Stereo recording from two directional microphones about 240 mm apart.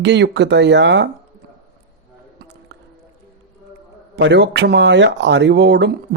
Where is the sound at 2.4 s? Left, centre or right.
Right.